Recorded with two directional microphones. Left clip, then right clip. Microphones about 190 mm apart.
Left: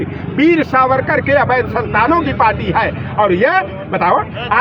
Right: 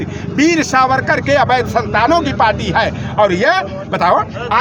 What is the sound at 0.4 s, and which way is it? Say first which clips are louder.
Speech: left 1 dB; 20° right (ahead or behind).